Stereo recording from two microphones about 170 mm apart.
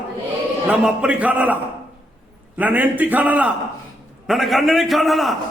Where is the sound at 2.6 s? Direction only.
10° right (ahead or behind).